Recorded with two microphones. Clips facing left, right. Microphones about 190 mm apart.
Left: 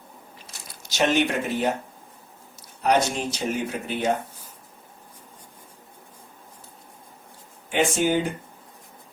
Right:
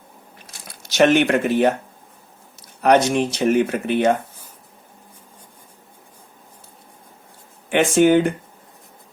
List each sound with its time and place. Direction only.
0.9 s speech: 65° right (ahead or behind)
2.8 s speech: 75° right (ahead or behind)
7.7 s speech: 60° right (ahead or behind)